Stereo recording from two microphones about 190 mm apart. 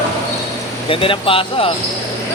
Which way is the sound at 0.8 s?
30° left (ahead or behind).